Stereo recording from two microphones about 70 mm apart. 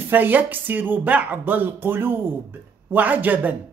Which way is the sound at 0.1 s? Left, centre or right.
Right.